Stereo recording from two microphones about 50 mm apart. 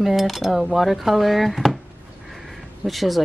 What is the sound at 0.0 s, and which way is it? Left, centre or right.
Speech, centre.